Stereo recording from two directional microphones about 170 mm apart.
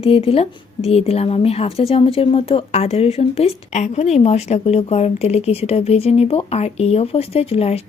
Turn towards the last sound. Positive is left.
turn(degrees=35)  # may be behind; listen again after turning